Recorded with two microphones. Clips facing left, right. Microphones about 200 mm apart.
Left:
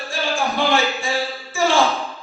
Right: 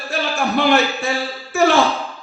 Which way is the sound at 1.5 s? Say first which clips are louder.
Right 4 dB; 65° right (ahead or behind).